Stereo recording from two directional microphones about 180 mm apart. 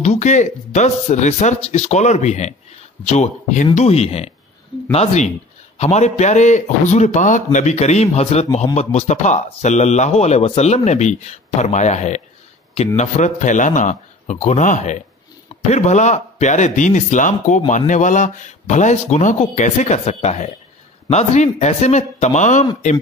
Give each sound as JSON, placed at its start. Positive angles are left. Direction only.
{"t": 0.0, "sound": "speech", "side_deg": 40}